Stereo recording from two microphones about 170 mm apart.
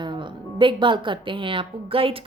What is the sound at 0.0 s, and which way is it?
Speech, 30° right (ahead or behind).